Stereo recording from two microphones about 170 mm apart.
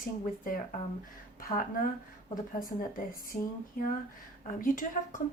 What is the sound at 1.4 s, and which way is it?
A woman's voice, 55° left (ahead or behind).